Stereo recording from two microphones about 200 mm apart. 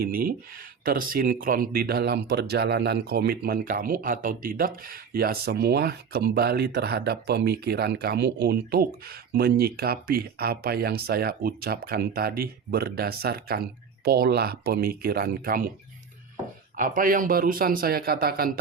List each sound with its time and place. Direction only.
0.0 s speech: 45° right (ahead or behind)
16.7 s speech: 40° right (ahead or behind)